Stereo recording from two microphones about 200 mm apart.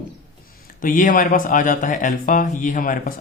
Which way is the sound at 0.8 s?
40° left (ahead or behind).